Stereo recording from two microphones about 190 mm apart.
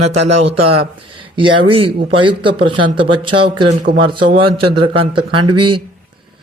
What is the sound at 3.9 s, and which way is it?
Speech, 55° right (ahead or behind).